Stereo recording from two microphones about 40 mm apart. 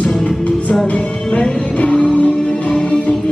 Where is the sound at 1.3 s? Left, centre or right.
Left.